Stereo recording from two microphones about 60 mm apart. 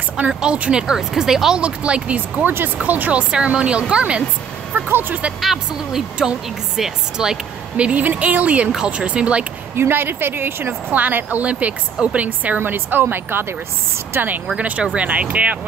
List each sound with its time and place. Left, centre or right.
0.3 s speech: centre
1.6 s a woman's voice: centre
4.7 s speech: right
5.7 s a woman's voice: centre
9.8 s a woman's voice: right
15.0 s a woman's voice: right